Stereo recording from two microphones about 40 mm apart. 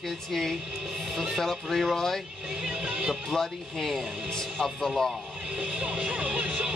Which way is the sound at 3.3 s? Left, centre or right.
Centre.